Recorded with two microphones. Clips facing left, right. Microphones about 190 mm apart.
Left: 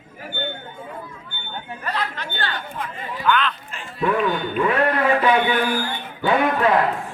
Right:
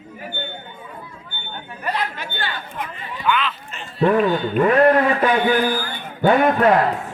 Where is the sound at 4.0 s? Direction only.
40° right (ahead or behind).